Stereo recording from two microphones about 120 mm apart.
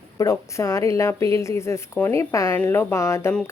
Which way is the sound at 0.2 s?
25° left (ahead or behind).